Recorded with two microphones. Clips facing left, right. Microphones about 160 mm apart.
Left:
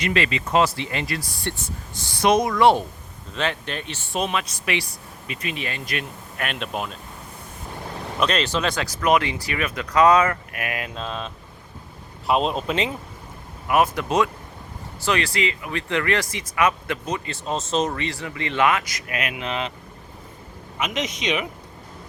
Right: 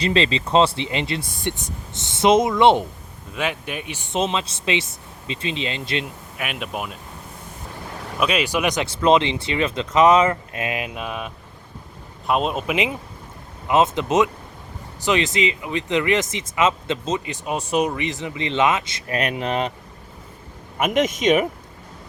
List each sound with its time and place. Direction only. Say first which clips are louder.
0.0 s speech: right 3 dB; 25° right (ahead or behind)
3.3 s speech: even; 10° right (ahead or behind)
6.3 s speech: left 1 dB; 5° right (ahead or behind)
8.2 s speech: right 2 dB; 10° right (ahead or behind)
12.3 s speech: even; 5° right (ahead or behind)
13.7 s speech: right 2 dB; 25° right (ahead or behind); by 19.7 s 40° right (ahead or behind)
20.7 s speech: right 7 dB; 50° right (ahead or behind)